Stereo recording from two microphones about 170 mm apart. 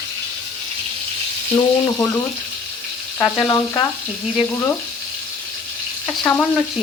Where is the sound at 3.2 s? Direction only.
20° left (ahead or behind).